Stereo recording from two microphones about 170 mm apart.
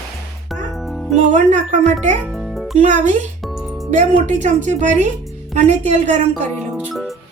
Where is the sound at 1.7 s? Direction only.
45° right (ahead or behind).